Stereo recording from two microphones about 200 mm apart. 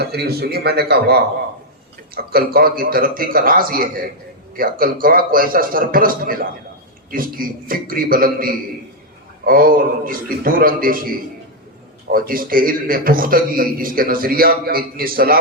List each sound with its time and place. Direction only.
0.0 s a man's voice: 50° right (ahead or behind)